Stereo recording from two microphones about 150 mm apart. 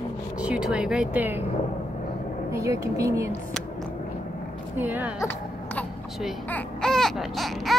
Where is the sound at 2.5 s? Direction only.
20° right (ahead or behind).